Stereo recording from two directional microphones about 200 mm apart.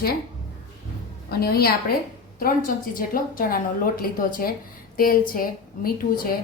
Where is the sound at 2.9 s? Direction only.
45° left (ahead or behind).